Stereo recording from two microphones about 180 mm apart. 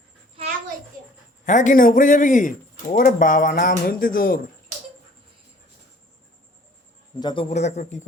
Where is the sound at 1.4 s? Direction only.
45° left (ahead or behind).